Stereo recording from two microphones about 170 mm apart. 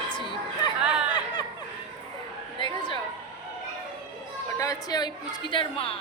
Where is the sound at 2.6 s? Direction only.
30° left (ahead or behind).